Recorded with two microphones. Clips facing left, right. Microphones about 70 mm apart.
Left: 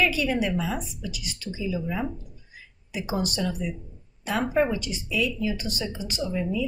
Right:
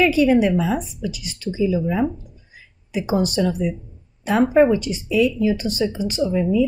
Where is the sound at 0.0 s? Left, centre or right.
Right.